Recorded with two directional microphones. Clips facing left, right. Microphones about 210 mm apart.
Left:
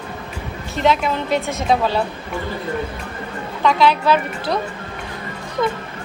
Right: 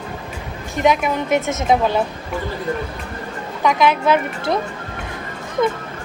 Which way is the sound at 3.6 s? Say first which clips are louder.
Even; 20° right (ahead or behind).